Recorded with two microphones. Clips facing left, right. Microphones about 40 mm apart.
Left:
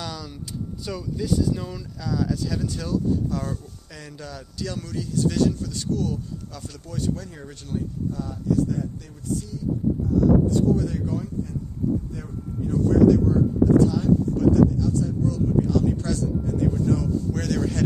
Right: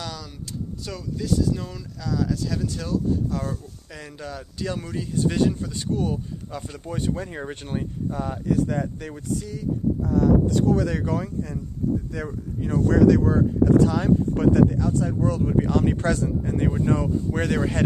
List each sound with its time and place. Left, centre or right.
0.0 s vehicle: centre
0.8 s speech: centre; by 17.8 s right